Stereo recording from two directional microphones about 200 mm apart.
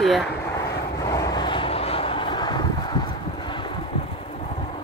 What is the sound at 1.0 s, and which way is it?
Vehicle, 15° left (ahead or behind).